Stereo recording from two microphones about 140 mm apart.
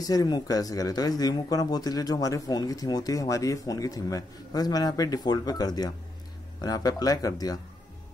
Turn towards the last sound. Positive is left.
turn(degrees=25)  # may be behind; listen again after turning